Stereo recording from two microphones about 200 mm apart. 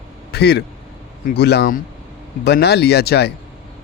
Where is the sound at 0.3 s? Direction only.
55° left (ahead or behind).